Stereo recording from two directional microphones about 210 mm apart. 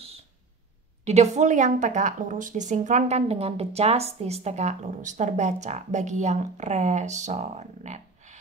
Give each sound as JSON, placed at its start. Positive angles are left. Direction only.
{"t": 1.0, "sound": "a woman's voice", "side_deg": -30}